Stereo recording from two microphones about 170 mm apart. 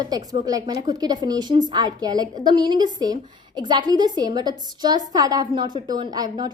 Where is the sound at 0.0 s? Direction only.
20° right (ahead or behind).